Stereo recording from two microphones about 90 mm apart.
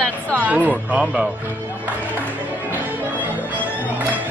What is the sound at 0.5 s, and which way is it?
Speech, 15° right (ahead or behind).